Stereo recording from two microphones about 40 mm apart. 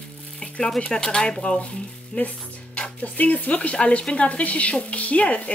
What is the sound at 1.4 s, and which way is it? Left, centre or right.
Speech, left.